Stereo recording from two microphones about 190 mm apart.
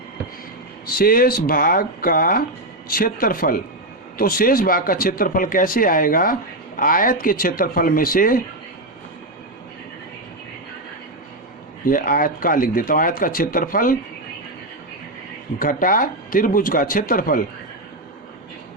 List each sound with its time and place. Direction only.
0.9 s speech: 50° left (ahead or behind)
11.9 s speech: 45° left (ahead or behind)
15.5 s speech: 45° left (ahead or behind)